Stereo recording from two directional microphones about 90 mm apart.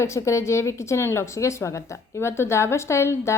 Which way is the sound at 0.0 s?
35° left (ahead or behind).